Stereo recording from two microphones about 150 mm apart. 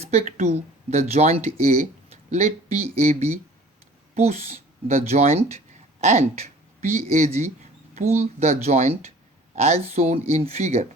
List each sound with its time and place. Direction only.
0.0 s speech: 50° right (ahead or behind)